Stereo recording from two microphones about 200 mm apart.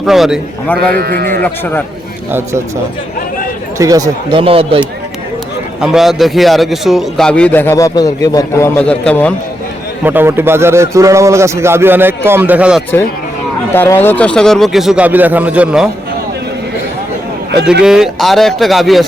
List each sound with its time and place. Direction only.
0.0 s a man's voice: centre (ahead or behind)
0.9 s a man's voice: 55° right (ahead or behind)
3.8 s speech: 15° right (ahead or behind)
5.8 s a man's voice: centre (ahead or behind)
10.0 s a man's voice: 10° right (ahead or behind)
13.7 s a man's voice: 10° left (ahead or behind); by 15.9 s 5° right (ahead or behind)
17.8 s a man's voice: 5° right (ahead or behind)